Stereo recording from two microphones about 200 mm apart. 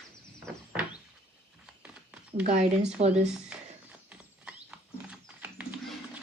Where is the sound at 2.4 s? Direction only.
30° right (ahead or behind).